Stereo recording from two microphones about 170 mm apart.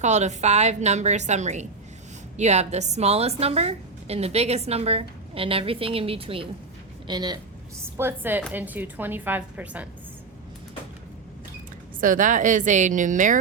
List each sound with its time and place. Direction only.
0.0 s a woman's voice: 40° right (ahead or behind); by 7.3 s 25° right (ahead or behind)
7.9 s a woman's voice: 15° right (ahead or behind)
11.9 s a woman's voice: 50° right (ahead or behind)